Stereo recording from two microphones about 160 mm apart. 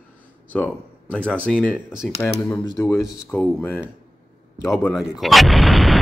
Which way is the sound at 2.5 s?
20° left (ahead or behind).